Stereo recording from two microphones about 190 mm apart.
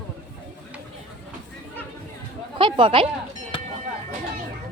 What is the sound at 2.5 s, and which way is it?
Speech, 25° right (ahead or behind).